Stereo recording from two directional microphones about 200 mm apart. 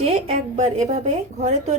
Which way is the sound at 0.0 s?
35° right (ahead or behind).